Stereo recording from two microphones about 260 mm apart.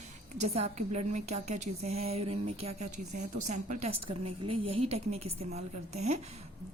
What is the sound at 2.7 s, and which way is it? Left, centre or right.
Speech, right.